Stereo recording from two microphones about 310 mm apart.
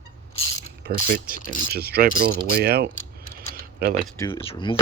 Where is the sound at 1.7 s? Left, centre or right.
Right.